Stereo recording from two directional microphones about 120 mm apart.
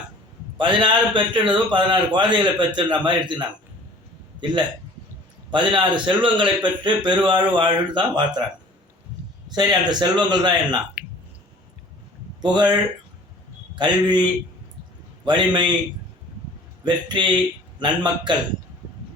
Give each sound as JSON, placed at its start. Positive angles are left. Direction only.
{"t": 0.5, "sound": "a man's voice", "side_deg": -45}
{"t": 9.6, "sound": "a man's voice", "side_deg": -35}
{"t": 11.0, "sound": "a sound", "side_deg": -10}
{"t": 12.4, "sound": "speech", "side_deg": -35}
{"t": 13.7, "sound": "a man's voice", "side_deg": -40}
{"t": 16.8, "sound": "a man's voice", "side_deg": -40}